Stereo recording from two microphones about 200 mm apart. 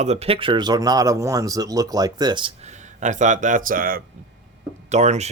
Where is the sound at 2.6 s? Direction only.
35° right (ahead or behind).